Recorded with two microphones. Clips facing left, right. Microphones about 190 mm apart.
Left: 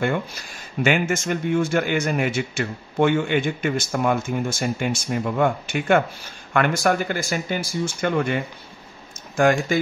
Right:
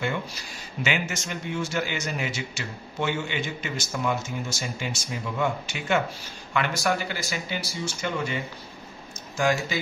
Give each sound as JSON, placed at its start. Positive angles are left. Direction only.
{"t": 0.0, "sound": "speech", "side_deg": 50}
{"t": 9.4, "sound": "speech", "side_deg": 55}